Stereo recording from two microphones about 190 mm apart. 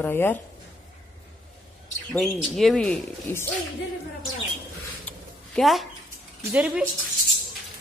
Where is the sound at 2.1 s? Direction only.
Centre (ahead or behind).